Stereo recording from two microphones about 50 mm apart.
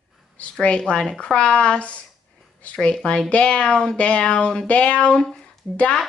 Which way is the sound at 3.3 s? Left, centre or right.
Left.